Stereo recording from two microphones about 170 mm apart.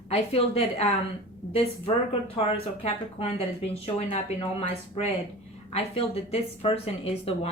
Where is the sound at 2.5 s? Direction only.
35° left (ahead or behind).